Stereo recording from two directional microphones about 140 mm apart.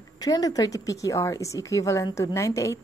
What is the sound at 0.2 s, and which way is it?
Speech, 25° left (ahead or behind).